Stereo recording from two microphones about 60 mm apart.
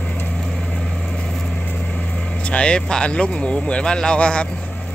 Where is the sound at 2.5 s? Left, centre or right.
Centre.